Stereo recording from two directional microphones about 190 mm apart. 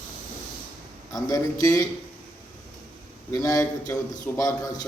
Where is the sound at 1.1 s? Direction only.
20° left (ahead or behind).